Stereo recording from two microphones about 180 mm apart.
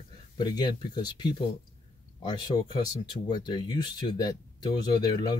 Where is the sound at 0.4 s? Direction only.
25° left (ahead or behind).